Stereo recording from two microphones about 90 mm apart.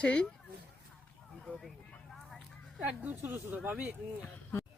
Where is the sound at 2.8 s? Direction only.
20° right (ahead or behind).